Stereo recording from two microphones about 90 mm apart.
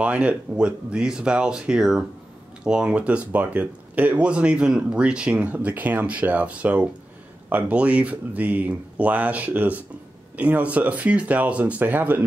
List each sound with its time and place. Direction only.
0.0 s speech: 15° right (ahead or behind)